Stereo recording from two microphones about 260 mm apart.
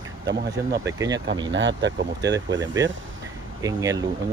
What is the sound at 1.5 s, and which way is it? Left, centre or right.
Speech, right.